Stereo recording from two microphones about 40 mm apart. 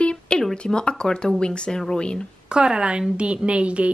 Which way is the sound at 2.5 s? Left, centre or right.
Right.